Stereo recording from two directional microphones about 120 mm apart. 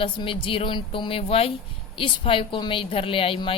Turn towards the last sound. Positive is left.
turn(degrees=50)  # may be behind; listen again after turning